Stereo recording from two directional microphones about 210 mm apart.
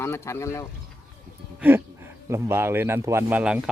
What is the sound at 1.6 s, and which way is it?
Speech, 10° right (ahead or behind).